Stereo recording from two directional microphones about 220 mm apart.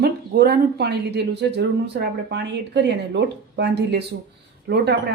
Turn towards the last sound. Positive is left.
turn(degrees=-50)  # may be behind; listen again after turning